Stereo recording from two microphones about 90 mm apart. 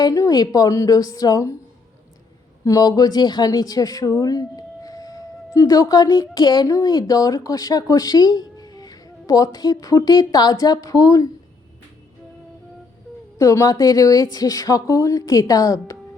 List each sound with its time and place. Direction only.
0.0 s a woman's voice: 45° left (ahead or behind)
2.6 s a woman's voice: 40° left (ahead or behind)
13.4 s a woman's voice: 40° left (ahead or behind)